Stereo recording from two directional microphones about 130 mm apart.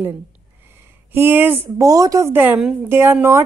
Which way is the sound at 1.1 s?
15° right (ahead or behind).